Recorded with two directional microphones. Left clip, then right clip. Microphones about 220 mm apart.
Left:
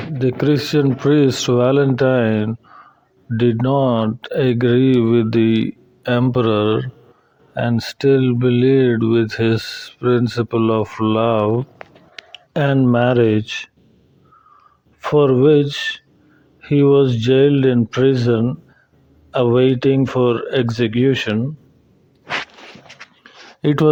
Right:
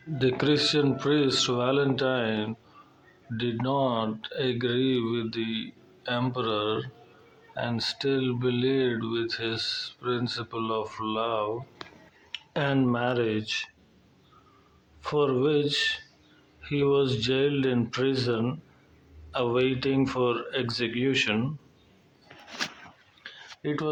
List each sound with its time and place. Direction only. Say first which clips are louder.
0.2 s speech: left 6 dB; 35° left (ahead or behind)
12.5 s speech: left 10 dB; 40° left (ahead or behind)
15.0 s speech: left 12 dB; 35° left (ahead or behind)
23.6 s speech: left 15 dB; 50° left (ahead or behind)